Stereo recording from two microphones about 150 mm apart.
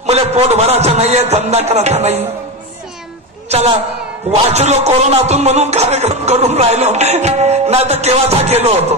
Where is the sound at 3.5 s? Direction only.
45° right (ahead or behind).